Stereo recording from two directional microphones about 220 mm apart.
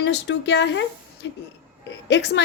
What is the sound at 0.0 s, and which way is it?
A woman's voice, 55° left (ahead or behind).